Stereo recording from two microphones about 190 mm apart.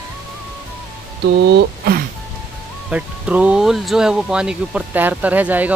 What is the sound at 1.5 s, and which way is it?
Speech, 60° right (ahead or behind).